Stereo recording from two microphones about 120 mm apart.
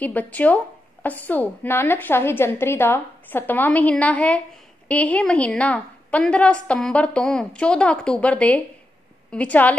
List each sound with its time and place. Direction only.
0.0 s a woman's voice: 15° left (ahead or behind)